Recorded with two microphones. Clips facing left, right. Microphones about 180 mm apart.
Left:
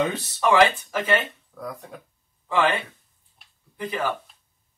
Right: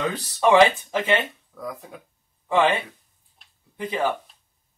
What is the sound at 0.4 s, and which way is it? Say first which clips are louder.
Speech: right 3 dB; 20° right (ahead or behind).